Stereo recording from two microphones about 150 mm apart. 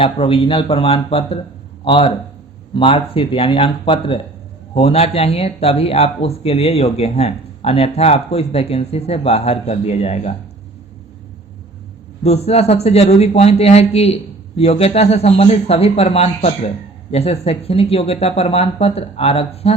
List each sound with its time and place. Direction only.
0.0 s a man's voice: 40° left (ahead or behind)
12.2 s a man's voice: 45° left (ahead or behind)